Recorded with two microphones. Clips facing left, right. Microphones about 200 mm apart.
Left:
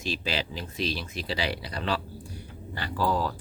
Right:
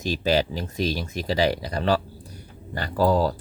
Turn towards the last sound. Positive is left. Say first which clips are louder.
# right 7 dB
turn(degrees=-35)  # may be behind; listen again after turning